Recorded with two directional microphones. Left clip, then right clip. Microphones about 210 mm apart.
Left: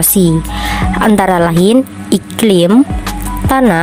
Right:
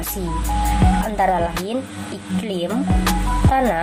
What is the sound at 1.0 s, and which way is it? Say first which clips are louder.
A woman's voice: left 11 dB; 50° left (ahead or behind).